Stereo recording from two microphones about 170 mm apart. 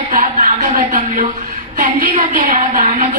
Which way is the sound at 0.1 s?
50° right (ahead or behind).